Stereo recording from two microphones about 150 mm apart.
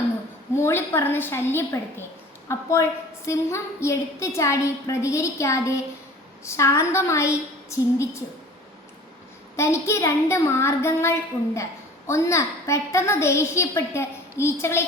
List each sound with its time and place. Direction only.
0.5 s a woman's voice: 15° left (ahead or behind)
9.6 s a woman's voice: 20° left (ahead or behind)